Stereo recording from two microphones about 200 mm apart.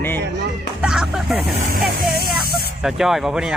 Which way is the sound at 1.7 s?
50° right (ahead or behind).